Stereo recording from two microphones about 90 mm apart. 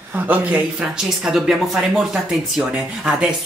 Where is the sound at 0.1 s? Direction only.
15° right (ahead or behind).